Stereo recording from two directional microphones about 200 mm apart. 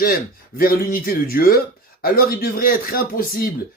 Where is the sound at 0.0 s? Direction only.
45° left (ahead or behind).